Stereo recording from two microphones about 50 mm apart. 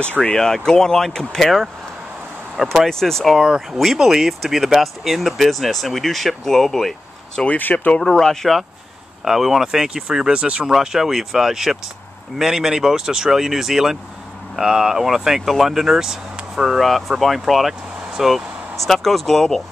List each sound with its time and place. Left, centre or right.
0.4 s speech: centre
2.9 s speech: centre
3.3 s speech: centre
7.4 s speech: left
8.1 s speech: centre
10.4 s speech: right
10.7 s speech: centre